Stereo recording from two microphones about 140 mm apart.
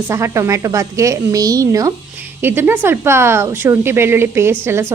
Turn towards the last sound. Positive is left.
turn(degrees=-15)  # may be behind; listen again after turning